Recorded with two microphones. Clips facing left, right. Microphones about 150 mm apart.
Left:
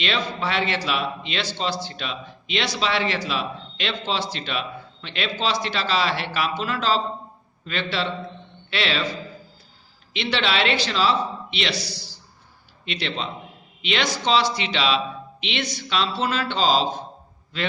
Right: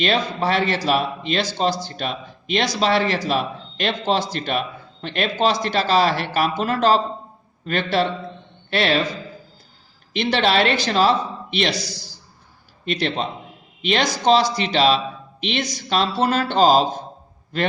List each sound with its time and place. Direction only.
0.0 s a man's voice: 45° right (ahead or behind)
10.1 s a man's voice: 45° right (ahead or behind)